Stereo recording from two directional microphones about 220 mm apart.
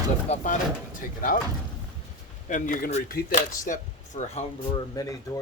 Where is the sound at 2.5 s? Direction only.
35° left (ahead or behind).